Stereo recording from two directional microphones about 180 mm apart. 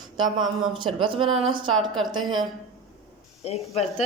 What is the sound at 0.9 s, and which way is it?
Speech, 30° right (ahead or behind).